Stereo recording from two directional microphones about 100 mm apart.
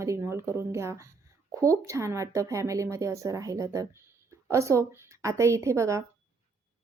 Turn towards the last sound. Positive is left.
turn(degrees=-30)  # may be behind; listen again after turning